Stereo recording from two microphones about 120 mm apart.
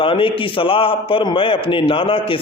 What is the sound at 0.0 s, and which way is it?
A man's voice, 45° left (ahead or behind).